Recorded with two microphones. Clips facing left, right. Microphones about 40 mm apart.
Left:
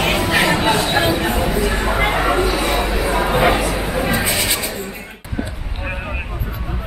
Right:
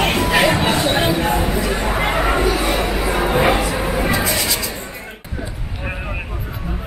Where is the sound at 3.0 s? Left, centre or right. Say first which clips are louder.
Left 1 dB; centre.